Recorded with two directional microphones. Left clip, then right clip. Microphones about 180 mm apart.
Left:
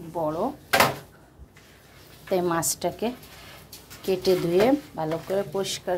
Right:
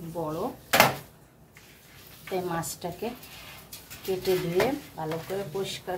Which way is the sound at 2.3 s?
55° left (ahead or behind).